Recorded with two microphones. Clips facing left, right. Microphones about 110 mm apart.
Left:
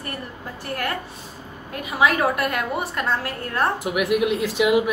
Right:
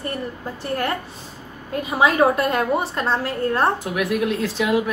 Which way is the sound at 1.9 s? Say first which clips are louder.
Right 3 dB; 30° right (ahead or behind).